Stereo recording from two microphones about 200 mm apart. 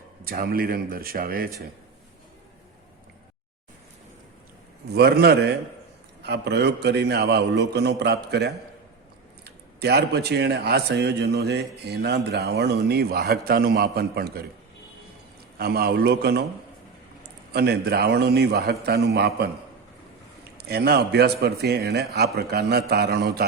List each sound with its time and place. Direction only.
0.3 s a man's voice: 45° right (ahead or behind)
4.9 s a man's voice: 55° right (ahead or behind)
9.8 s a man's voice: 55° right (ahead or behind)
15.5 s a man's voice: 50° right (ahead or behind)
17.5 s a man's voice: 55° right (ahead or behind)
20.7 s a man's voice: 50° right (ahead or behind)